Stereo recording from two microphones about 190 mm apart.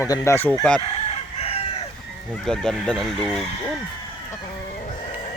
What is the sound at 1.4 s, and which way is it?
Chicken, 30° left (ahead or behind).